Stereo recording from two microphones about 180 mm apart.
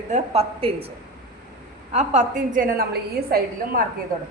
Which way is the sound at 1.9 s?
40° right (ahead or behind).